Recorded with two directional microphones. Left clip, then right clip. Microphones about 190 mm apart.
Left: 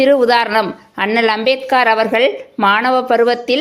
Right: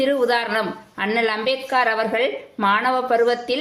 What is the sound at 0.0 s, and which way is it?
A woman's voice, 40° left (ahead or behind).